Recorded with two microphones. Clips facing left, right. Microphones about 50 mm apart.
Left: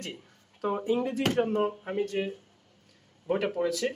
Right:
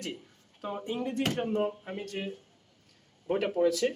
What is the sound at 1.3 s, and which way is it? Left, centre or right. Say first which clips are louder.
Speech: left 6 dB; left.